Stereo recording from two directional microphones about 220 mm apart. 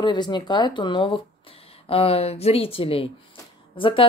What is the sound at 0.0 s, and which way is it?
Speech, 20° left (ahead or behind).